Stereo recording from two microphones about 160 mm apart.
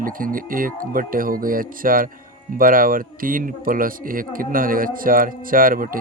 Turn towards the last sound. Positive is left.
turn(degrees=-60)  # may be behind; listen again after turning